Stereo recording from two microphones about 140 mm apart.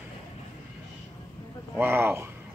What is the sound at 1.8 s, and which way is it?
Speech, 15° right (ahead or behind).